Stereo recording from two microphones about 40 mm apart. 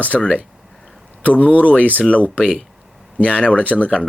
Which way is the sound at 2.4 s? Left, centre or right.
Left.